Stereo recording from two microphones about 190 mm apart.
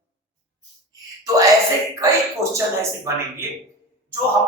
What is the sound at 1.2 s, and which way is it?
Speech, 15° right (ahead or behind).